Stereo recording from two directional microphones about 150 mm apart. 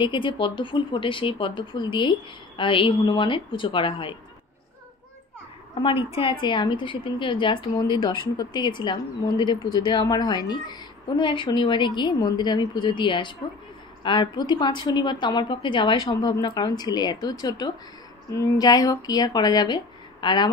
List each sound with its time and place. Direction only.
0.0 s a woman's voice: 30° left (ahead or behind)
5.8 s a woman's voice: 35° left (ahead or behind)